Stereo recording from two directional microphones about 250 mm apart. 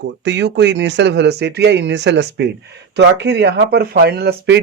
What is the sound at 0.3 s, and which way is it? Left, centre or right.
A man's voice, right.